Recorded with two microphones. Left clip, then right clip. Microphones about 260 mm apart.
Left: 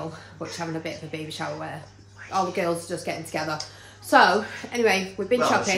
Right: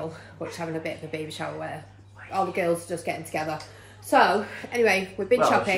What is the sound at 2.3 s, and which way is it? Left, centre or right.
A woman's voice, centre.